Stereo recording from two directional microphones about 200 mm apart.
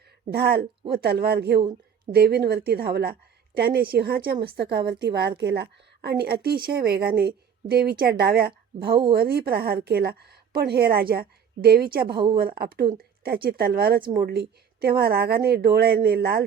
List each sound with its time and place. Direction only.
0.3 s a woman's voice: 55° right (ahead or behind)
12.1 s a woman's voice: 25° right (ahead or behind)
12.4 s a woman's voice: 50° right (ahead or behind)